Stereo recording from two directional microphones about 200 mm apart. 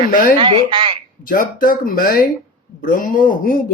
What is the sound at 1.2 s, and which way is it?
Speech, 45° left (ahead or behind).